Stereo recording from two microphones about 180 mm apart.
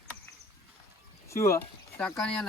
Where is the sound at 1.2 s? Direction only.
15° left (ahead or behind).